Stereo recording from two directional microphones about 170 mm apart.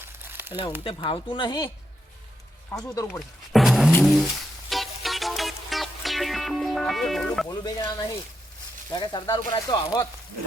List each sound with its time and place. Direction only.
0.3 s crumpling: 15° right (ahead or behind)
0.9 s speech: 30° left (ahead or behind)
2.7 s speech: 20° left (ahead or behind)
3.2 s speech: centre (ahead or behind)
4.0 s music: centre (ahead or behind)
7.4 s speech: 20° left (ahead or behind)